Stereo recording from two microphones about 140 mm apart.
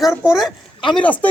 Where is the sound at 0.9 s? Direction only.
10° left (ahead or behind).